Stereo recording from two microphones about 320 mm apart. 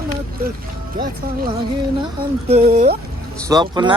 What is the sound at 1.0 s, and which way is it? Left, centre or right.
Speech, right.